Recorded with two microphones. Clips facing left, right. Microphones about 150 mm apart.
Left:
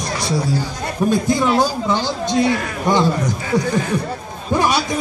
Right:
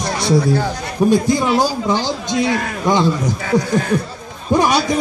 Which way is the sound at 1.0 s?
10° right (ahead or behind).